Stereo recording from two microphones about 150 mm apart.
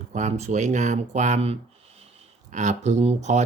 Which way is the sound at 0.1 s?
50° right (ahead or behind).